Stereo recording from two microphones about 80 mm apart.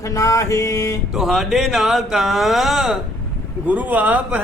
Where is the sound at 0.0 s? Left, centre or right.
Left.